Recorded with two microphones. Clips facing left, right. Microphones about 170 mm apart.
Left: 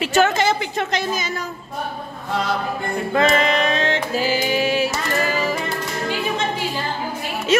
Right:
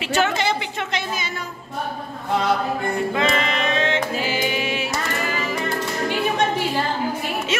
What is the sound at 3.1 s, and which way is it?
Music, 45° left (ahead or behind).